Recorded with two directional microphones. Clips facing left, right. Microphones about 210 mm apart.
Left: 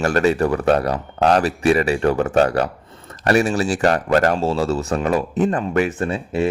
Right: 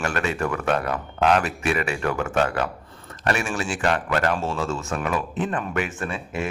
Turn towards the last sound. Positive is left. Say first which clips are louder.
# left 8 dB
turn(degrees=35)  # may be behind; listen again after turning